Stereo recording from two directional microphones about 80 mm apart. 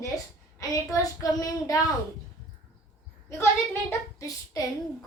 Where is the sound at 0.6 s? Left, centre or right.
Left.